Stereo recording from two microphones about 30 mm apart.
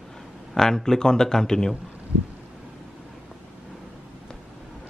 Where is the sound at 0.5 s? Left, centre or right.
Centre.